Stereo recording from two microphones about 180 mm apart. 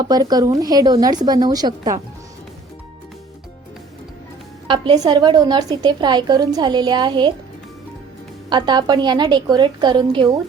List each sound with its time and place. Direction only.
0.0 s a woman's voice: 20° right (ahead or behind)
4.7 s a woman's voice: 25° right (ahead or behind)
8.4 s a woman's voice: 25° right (ahead or behind)